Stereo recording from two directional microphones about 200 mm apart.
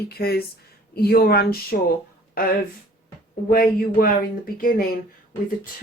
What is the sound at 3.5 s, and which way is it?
Speech, 45° left (ahead or behind).